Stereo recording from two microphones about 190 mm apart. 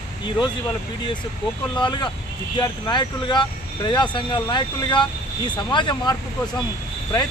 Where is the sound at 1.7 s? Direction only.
25° left (ahead or behind).